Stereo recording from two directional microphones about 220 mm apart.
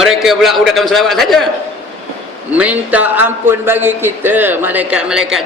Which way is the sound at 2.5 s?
5° right (ahead or behind).